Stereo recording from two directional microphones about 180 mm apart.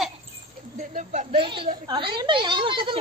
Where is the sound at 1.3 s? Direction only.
30° right (ahead or behind).